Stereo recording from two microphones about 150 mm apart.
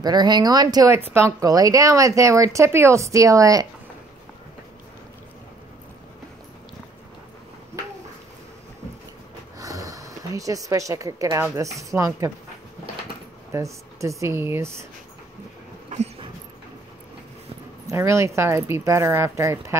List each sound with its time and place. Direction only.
0.0 s speech: 30° right (ahead or behind)
9.6 s a sound: 25° right (ahead or behind)
11.5 s speech: 20° right (ahead or behind)
13.5 s speech: 20° right (ahead or behind)
15.9 s dog: 45° right (ahead or behind)
17.8 s speech: 20° right (ahead or behind)